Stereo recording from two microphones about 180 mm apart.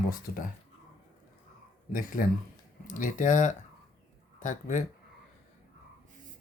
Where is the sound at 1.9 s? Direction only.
50° left (ahead or behind).